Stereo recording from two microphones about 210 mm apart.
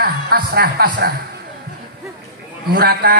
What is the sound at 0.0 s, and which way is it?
Speech, 45° right (ahead or behind).